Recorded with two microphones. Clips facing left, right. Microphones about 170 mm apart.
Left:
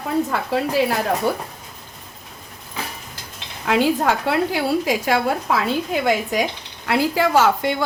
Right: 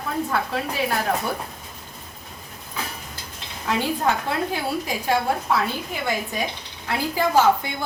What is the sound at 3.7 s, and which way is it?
A woman's voice, 90° left.